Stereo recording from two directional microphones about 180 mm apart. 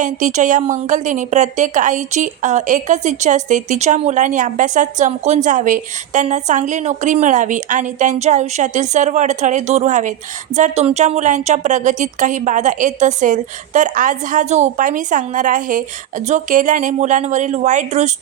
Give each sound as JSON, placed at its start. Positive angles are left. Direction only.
{"t": 0.0, "sound": "a woman's voice", "side_deg": -45}